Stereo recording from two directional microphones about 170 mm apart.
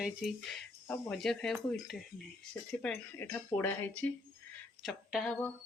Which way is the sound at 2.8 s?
15° left (ahead or behind).